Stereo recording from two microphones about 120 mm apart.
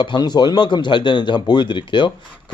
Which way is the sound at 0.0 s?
40° left (ahead or behind).